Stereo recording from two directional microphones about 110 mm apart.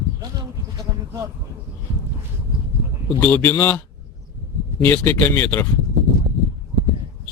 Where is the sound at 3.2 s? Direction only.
15° left (ahead or behind).